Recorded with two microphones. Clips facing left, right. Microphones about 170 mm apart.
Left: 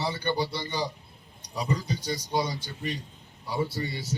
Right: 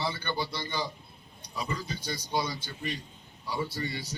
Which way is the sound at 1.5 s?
40° left (ahead or behind).